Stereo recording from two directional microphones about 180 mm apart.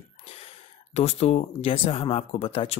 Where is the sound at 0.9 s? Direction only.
35° left (ahead or behind).